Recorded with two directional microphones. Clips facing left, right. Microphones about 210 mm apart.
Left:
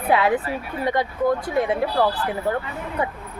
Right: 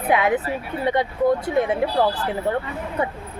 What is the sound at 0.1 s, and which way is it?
Speech, 20° right (ahead or behind).